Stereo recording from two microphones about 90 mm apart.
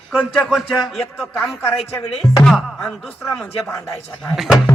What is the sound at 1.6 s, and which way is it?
Speech, 25° left (ahead or behind).